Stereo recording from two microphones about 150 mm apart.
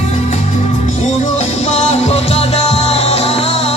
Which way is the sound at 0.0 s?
50° left (ahead or behind).